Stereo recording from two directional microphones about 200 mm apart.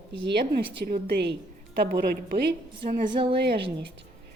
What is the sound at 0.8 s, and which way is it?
A woman's voice, 50° right (ahead or behind).